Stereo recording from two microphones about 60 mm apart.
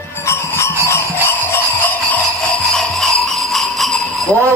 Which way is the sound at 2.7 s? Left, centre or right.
Centre.